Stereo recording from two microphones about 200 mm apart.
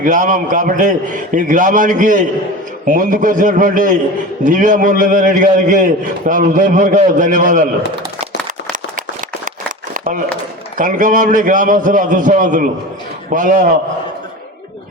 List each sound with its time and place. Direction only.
0.0 s a man's voice: 40° right (ahead or behind)
9.9 s a sound: 40° right (ahead or behind)
10.8 s a man's voice: 40° right (ahead or behind)